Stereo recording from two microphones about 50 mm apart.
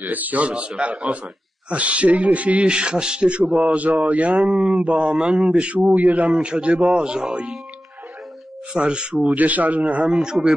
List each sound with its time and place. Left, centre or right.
0.0 s a man's voice: right
6.2 s a man's voice: centre
8.7 s a man's voice: centre
10.0 s speech: centre